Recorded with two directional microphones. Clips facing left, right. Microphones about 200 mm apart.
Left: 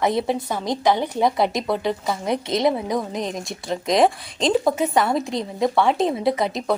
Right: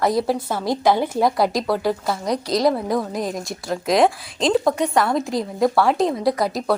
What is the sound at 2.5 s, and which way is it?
Speech, 20° left (ahead or behind).